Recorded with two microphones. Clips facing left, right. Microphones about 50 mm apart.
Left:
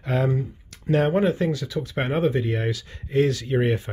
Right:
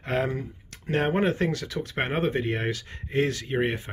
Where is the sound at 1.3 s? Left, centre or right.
Right.